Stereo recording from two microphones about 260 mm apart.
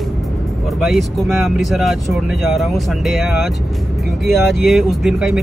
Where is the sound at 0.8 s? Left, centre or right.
Centre.